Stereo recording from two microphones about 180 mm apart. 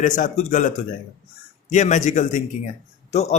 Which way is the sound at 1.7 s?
45° left (ahead or behind).